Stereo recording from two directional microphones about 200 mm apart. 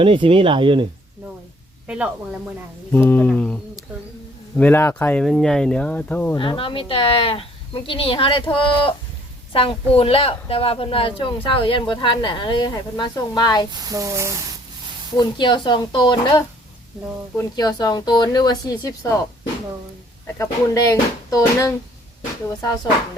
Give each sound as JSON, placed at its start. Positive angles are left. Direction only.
{"t": 0.0, "sound": "speech", "side_deg": -25}
{"t": 2.9, "sound": "speech", "side_deg": 10}
{"t": 6.3, "sound": "speech", "side_deg": 25}
{"t": 13.9, "sound": "speech", "side_deg": -15}
{"t": 15.2, "sound": "speech", "side_deg": 20}
{"t": 20.4, "sound": "speech", "side_deg": 15}